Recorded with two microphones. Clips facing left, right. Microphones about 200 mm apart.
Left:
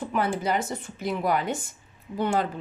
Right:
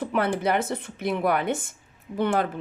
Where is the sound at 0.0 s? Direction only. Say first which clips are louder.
Right 2 dB; 60° right (ahead or behind).